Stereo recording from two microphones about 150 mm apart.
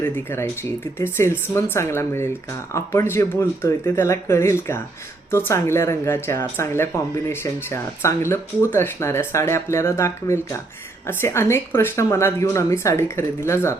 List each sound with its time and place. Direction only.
0.0 s speech: 15° left (ahead or behind)